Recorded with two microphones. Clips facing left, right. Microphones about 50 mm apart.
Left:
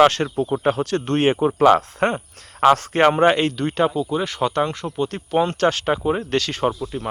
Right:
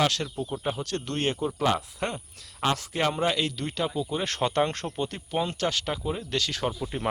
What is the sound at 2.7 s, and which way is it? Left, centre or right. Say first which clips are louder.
Speech: left 11 dB; left.